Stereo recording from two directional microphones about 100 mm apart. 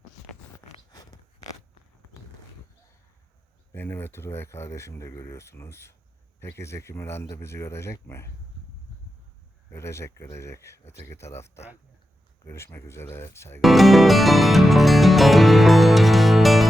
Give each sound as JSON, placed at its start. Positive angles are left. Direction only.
{"t": 3.7, "sound": "speech", "side_deg": 25}
{"t": 9.7, "sound": "speech", "side_deg": 30}
{"t": 13.6, "sound": "music", "side_deg": 0}